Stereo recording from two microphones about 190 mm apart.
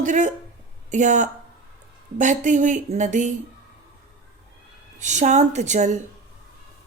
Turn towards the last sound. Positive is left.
turn(degrees=-40)  # may be behind; listen again after turning